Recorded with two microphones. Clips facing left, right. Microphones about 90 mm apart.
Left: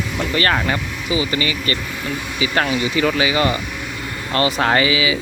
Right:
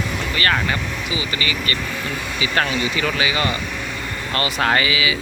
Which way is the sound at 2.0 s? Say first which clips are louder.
Left 5 dB; 20° left (ahead or behind).